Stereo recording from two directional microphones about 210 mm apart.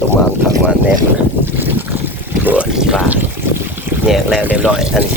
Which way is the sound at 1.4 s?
10° right (ahead or behind).